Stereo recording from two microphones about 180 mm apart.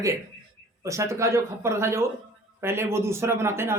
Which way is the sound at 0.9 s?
15° right (ahead or behind).